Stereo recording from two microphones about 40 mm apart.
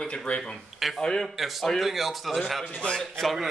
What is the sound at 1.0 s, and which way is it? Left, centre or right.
Speech, centre.